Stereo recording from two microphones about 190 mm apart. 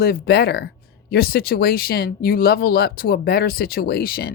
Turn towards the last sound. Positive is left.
turn(degrees=50)  # may be behind; listen again after turning